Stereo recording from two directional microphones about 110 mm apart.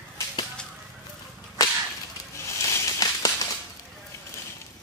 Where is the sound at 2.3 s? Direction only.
25° left (ahead or behind).